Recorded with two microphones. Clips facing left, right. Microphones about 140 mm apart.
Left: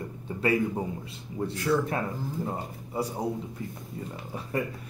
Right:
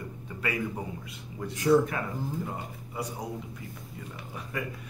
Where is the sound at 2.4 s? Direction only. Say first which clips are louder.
Left 4 dB; 30° left (ahead or behind).